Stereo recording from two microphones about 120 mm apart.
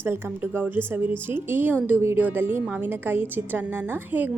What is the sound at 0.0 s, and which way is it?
A woman's voice, 20° right (ahead or behind).